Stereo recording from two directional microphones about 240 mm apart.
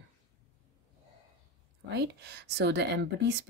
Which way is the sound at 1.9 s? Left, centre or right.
Right.